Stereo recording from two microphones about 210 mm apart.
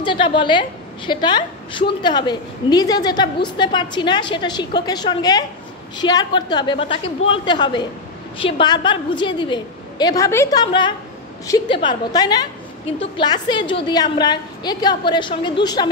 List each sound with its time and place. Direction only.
0.0 s a woman's voice: 25° left (ahead or behind)